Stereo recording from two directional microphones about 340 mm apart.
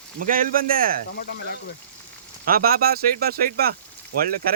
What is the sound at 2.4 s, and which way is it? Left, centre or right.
Speech, right.